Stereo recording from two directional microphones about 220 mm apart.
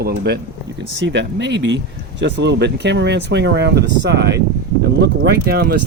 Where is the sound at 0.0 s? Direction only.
45° right (ahead or behind).